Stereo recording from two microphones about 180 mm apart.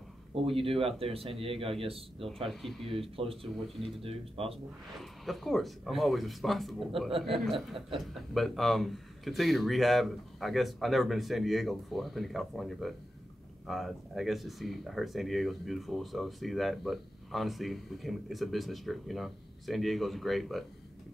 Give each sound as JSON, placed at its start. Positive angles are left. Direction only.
{"t": 0.6, "sound": "speech", "side_deg": -30}
{"t": 2.4, "sound": "speech", "side_deg": 0}
{"t": 2.9, "sound": "speech", "side_deg": -30}
{"t": 4.9, "sound": "speech", "side_deg": 0}
{"t": 7.1, "sound": "speech", "side_deg": -30}
{"t": 7.3, "sound": "speech", "side_deg": 0}